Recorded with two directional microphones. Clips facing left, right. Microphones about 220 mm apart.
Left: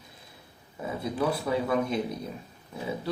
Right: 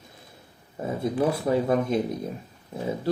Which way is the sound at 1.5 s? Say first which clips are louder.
Right 4 dB; 45° right (ahead or behind).